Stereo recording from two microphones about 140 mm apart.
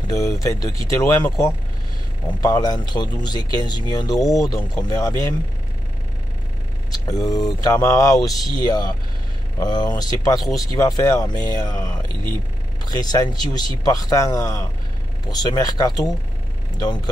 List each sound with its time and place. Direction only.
0.1 s speech: 25° left (ahead or behind)
2.4 s speech: 30° left (ahead or behind)
6.9 s speech: 25° left (ahead or behind)